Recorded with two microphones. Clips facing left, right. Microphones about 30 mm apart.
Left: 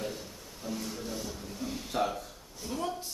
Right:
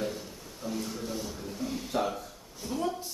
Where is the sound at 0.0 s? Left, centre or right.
Centre.